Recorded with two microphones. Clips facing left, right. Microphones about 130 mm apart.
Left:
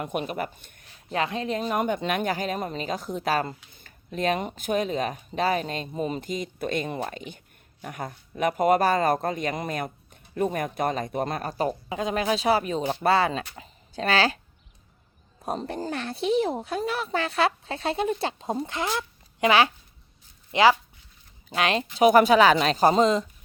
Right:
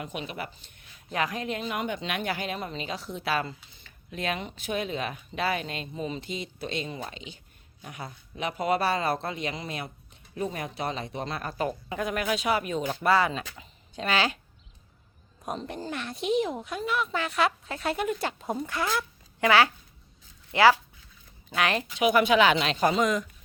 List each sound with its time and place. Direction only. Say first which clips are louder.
0.0 s speech: left 6 dB; 50° left (ahead or behind)
1.1 s speech: left 3 dB; 30° left (ahead or behind)
11.9 s speech: left 3 dB; 20° left (ahead or behind)
15.4 s speech: left 4 dB; 35° left (ahead or behind)
21.9 s speech: left 5 dB; 40° left (ahead or behind)